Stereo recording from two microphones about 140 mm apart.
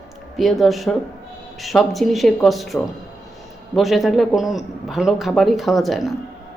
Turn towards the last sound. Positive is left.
turn(degrees=0)  # may be behind; listen again after turning